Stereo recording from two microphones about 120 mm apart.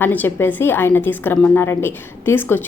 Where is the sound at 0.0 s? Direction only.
15° left (ahead or behind).